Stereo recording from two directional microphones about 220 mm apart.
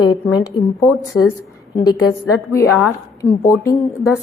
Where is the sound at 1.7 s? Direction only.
20° left (ahead or behind).